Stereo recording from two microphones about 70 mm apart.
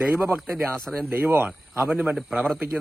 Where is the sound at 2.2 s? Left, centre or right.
Centre.